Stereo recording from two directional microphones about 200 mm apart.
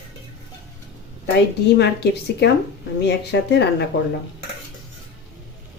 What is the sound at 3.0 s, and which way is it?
Speech, 55° left (ahead or behind).